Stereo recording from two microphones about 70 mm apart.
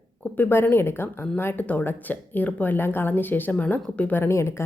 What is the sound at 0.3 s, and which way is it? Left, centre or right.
A woman's voice, left.